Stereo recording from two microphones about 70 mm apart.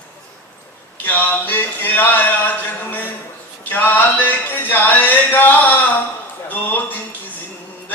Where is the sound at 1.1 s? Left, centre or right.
Left.